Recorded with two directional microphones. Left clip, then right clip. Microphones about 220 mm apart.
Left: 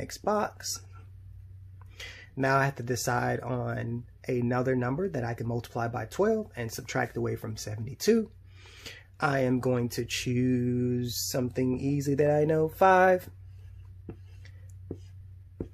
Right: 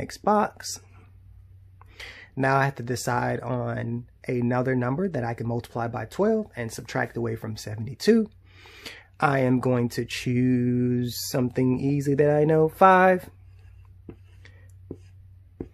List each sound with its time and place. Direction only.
0.0 s speech: 20° right (ahead or behind)
1.9 s speech: 20° right (ahead or behind)
14.4 s a sound: 20° right (ahead or behind)